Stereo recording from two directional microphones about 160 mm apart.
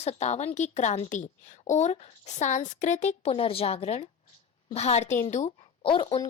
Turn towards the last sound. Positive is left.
turn(degrees=30)  # may be behind; listen again after turning